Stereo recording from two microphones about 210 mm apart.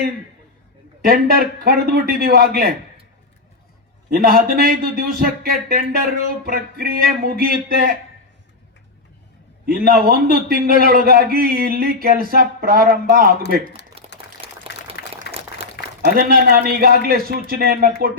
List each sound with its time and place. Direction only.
1.0 s speech: 45° right (ahead or behind)
4.1 s speech: 45° right (ahead or behind)
9.6 s speech: 45° right (ahead or behind)
14.0 s a sound: 25° right (ahead or behind)
15.0 s a sound: 55° left (ahead or behind)
16.0 s speech: 45° right (ahead or behind)